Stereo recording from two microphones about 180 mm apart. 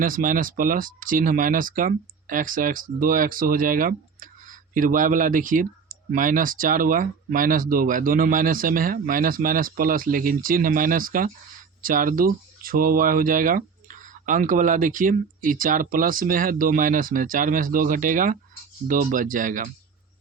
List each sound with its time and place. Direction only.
0.0 s speech: 50° right (ahead or behind)